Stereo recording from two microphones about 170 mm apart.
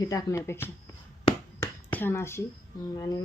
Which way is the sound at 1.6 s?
10° left (ahead or behind).